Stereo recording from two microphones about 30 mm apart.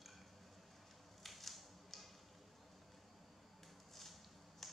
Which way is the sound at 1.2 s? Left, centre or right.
Centre.